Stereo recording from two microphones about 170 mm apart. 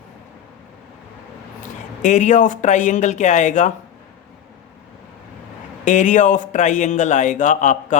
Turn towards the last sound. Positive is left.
turn(degrees=45)  # may be behind; listen again after turning